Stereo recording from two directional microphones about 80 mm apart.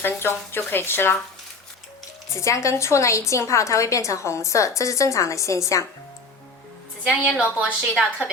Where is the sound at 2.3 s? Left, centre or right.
Left.